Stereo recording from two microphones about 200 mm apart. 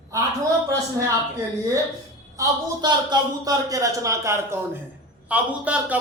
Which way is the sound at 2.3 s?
20° right (ahead or behind).